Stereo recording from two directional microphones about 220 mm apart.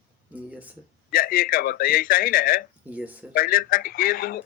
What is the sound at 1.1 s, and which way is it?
Speech, 40° left (ahead or behind).